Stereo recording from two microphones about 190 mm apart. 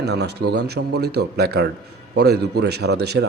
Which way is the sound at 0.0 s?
60° right (ahead or behind).